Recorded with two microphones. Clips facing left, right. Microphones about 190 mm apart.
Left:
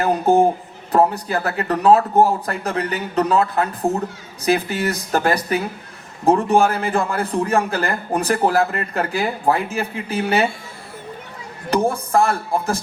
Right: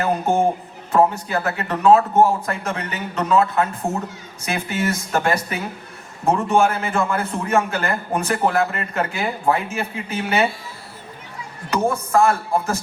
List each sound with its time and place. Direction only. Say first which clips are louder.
0.0 s a man's voice: left 3 dB; 35° left (ahead or behind)
11.7 s a man's voice: left 1 dB; 35° left (ahead or behind)